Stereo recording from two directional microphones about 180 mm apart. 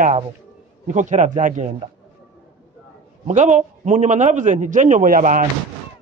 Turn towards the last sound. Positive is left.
turn(degrees=-45)  # may be behind; listen again after turning